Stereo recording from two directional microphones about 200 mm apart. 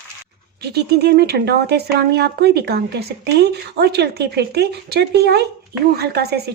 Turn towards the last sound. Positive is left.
turn(degrees=-55)  # may be behind; listen again after turning